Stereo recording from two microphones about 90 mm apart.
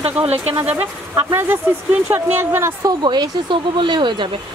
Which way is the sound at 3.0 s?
55° right (ahead or behind).